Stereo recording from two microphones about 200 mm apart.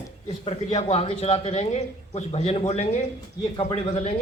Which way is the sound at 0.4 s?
30° left (ahead or behind).